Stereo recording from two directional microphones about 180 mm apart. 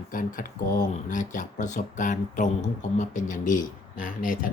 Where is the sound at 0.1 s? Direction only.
50° left (ahead or behind).